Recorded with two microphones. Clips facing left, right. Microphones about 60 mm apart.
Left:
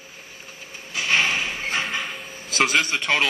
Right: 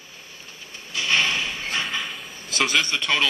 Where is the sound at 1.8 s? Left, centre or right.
Centre.